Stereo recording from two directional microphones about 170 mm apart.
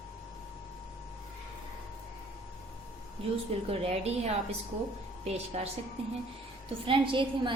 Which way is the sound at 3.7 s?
35° right (ahead or behind).